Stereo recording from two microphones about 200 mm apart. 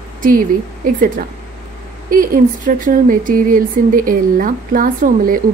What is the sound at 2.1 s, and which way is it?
Speech, 40° right (ahead or behind).